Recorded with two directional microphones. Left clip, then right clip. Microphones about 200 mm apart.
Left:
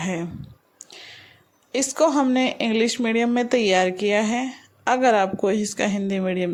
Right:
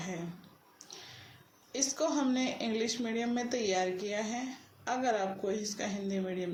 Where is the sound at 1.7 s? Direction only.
50° left (ahead or behind).